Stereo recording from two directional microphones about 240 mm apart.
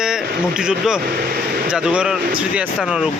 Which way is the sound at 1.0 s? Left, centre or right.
Right.